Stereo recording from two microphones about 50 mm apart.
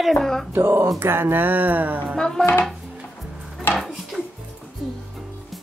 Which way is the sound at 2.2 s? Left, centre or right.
Centre.